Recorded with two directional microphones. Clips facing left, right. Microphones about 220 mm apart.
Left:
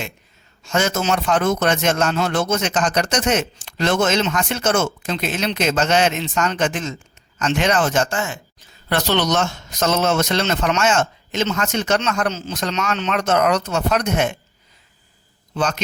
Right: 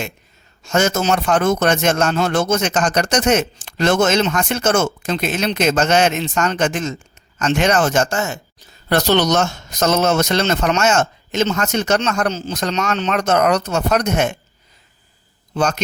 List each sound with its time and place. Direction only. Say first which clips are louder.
0.6 s a man's voice: right 3 dB; 45° right (ahead or behind)